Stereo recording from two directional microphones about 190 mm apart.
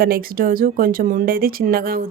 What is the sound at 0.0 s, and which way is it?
Speech, 50° right (ahead or behind).